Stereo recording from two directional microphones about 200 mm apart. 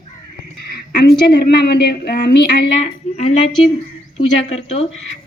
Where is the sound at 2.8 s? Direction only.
35° left (ahead or behind).